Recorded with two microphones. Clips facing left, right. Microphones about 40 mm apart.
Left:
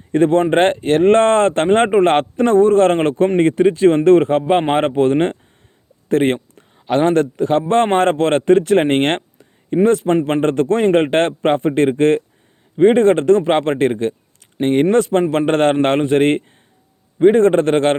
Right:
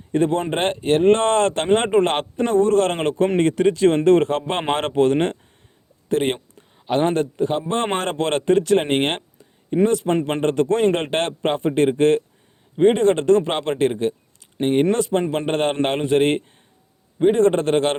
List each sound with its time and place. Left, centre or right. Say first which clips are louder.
0.1 s a man's voice: left 6 dB; left
3.3 s speech: left 4 dB; left
6.1 s a sound: left 5 dB; left
6.8 s a man's voice: left 5 dB; left
8.1 s a man's voice: left 5 dB; left
10.8 s a man's voice: left 6 dB; left